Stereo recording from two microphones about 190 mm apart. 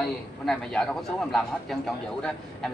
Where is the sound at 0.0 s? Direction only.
5° left (ahead or behind).